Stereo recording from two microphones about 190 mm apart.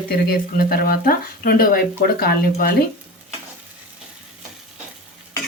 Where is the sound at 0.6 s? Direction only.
55° left (ahead or behind).